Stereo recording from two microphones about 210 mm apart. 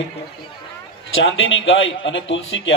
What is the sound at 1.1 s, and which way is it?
A man's voice, 65° left (ahead or behind).